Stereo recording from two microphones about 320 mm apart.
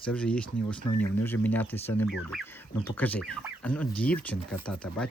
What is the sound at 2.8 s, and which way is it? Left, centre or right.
Speech, centre.